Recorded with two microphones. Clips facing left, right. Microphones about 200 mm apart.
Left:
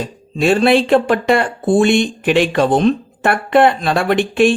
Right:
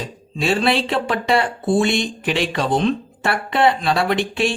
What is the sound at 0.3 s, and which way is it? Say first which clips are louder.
Speech: left 7 dB; 50° left (ahead or behind).